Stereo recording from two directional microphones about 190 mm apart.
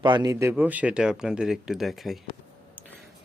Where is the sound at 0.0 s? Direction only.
25° right (ahead or behind); by 2.1 s centre (ahead or behind).